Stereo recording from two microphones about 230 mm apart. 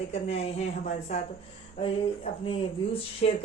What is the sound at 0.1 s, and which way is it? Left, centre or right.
Speech, left.